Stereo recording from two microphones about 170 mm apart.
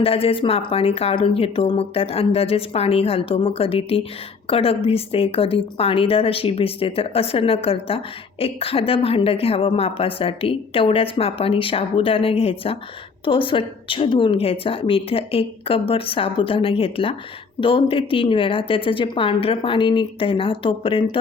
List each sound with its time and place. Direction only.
0.0 s a woman's voice: 35° left (ahead or behind)